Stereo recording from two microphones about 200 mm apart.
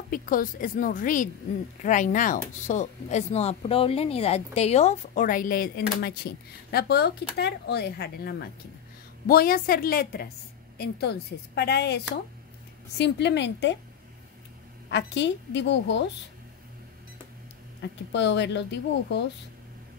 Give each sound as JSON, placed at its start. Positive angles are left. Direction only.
{"t": 0.1, "sound": "a woman's voice", "side_deg": 45}
{"t": 14.9, "sound": "a woman's voice", "side_deg": 60}
{"t": 18.1, "sound": "a woman's voice", "side_deg": 60}